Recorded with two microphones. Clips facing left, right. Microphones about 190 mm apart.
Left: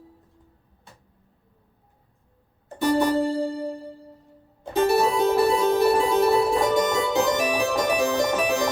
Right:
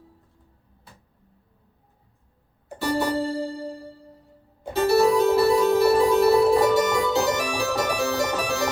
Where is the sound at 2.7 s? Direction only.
20° left (ahead or behind).